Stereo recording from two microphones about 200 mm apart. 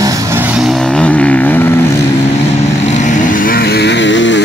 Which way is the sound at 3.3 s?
45° left (ahead or behind).